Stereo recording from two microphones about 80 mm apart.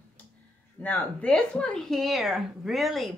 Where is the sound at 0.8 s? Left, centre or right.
Centre.